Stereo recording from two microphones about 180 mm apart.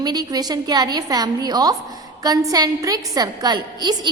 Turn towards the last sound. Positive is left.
turn(degrees=-25)  # may be behind; listen again after turning